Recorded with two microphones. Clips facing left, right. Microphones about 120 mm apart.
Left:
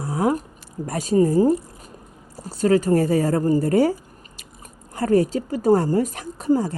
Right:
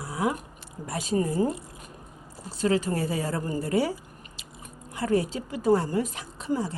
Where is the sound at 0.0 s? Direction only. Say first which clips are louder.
Left 7 dB; 45° left (ahead or behind).